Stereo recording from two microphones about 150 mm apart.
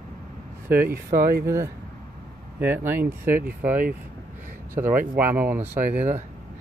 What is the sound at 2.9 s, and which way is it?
Speech, 15° right (ahead or behind).